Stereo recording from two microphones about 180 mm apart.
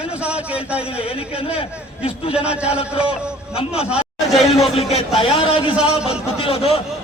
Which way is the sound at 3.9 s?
5° right (ahead or behind).